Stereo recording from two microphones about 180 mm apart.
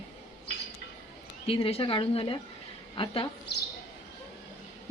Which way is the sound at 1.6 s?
30° left (ahead or behind).